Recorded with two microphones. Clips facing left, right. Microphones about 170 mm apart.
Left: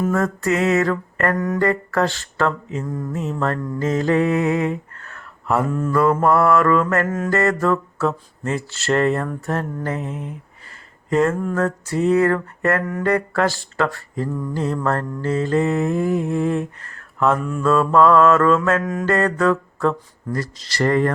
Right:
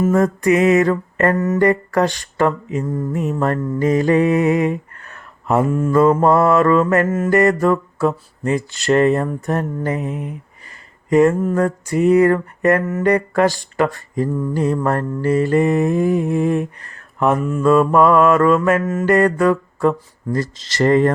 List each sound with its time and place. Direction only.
0.1 s mantra: 15° right (ahead or behind)
3.8 s speech: 15° right (ahead or behind)
5.6 s mantra: 10° right (ahead or behind)
5.9 s mantra: 20° right (ahead or behind)
18.8 s mantra: centre (ahead or behind)
19.0 s mantra: 15° right (ahead or behind)
20.3 s mantra: 25° right (ahead or behind)